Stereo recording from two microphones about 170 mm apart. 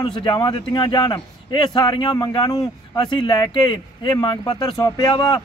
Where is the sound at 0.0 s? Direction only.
25° left (ahead or behind).